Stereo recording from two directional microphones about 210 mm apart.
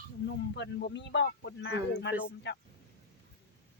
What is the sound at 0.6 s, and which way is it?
Speech, 55° left (ahead or behind).